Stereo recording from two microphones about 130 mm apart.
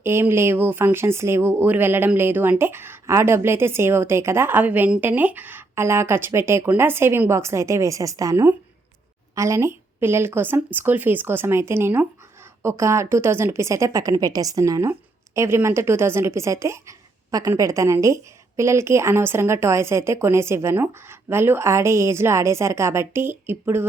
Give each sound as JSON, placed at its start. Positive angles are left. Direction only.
{"t": 0.0, "sound": "a woman's voice", "side_deg": -20}